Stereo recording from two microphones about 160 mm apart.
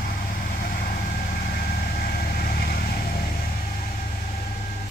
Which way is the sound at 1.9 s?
65° left (ahead or behind).